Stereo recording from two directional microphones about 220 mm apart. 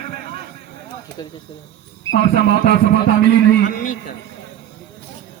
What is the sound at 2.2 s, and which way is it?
Speech, 45° right (ahead or behind).